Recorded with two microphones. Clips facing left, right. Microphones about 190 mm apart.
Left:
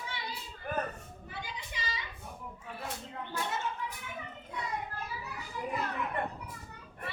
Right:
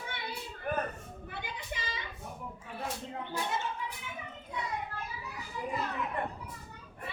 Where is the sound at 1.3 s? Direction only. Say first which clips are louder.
Right 2 dB; 55° right (ahead or behind).